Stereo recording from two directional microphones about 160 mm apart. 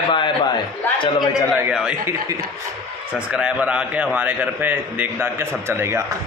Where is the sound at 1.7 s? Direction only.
5° right (ahead or behind).